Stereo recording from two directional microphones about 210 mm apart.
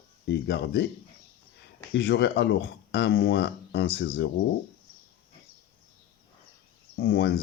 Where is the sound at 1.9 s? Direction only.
55° left (ahead or behind).